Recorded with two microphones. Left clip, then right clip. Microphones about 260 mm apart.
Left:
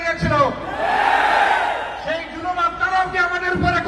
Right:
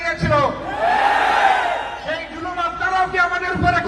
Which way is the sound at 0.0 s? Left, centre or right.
Right.